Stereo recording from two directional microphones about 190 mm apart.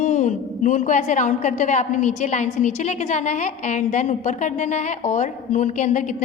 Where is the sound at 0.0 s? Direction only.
40° left (ahead or behind).